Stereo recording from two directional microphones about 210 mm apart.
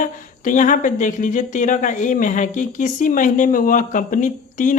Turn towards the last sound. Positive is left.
turn(degrees=40)  # may be behind; listen again after turning